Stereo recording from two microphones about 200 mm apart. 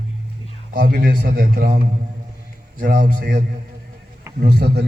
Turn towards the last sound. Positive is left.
turn(degrees=-55)  # may be behind; listen again after turning